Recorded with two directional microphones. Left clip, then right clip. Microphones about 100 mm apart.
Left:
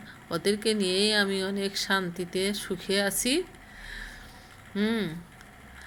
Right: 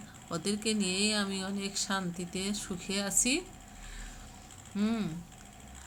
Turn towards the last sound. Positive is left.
turn(degrees=-5)  # may be behind; listen again after turning